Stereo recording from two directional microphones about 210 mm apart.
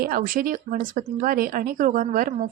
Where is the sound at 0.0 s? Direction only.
40° right (ahead or behind).